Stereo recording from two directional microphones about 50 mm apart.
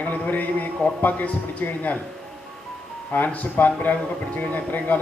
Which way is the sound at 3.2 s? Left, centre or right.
Left.